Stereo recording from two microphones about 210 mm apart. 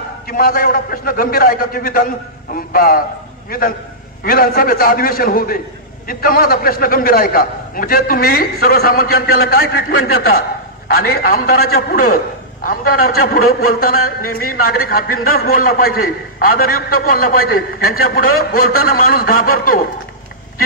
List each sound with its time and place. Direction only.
0.3 s a man's voice: 45° left (ahead or behind)